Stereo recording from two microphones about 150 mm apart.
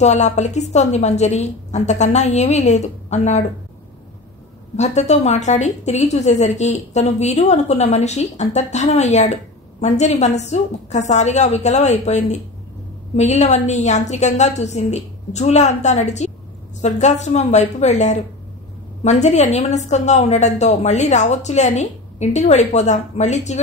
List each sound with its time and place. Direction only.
0.0 s a woman's voice: 50° left (ahead or behind)
4.7 s a woman's voice: 50° left (ahead or behind)